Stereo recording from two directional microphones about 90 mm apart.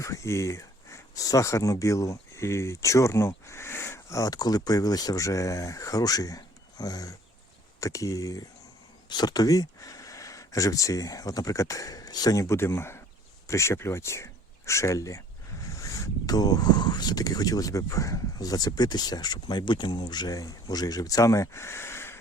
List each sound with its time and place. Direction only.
0.0 s speech: 35° left (ahead or behind)